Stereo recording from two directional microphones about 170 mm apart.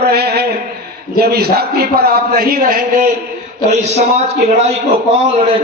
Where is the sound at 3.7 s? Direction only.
40° right (ahead or behind).